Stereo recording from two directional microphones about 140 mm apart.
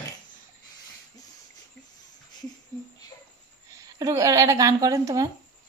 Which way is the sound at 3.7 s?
25° right (ahead or behind).